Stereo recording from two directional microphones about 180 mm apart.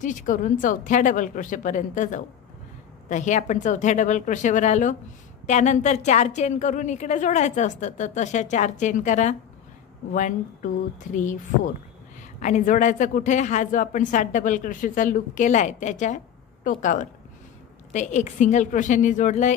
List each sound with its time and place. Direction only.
0.0 s a woman's voice: 45° left (ahead or behind)